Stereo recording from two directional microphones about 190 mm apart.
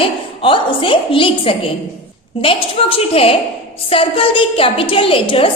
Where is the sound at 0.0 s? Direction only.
25° left (ahead or behind).